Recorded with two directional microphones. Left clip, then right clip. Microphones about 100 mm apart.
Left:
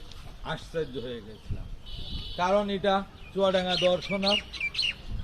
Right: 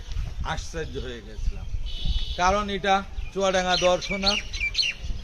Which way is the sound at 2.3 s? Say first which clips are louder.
Right 2 dB; 30° right (ahead or behind).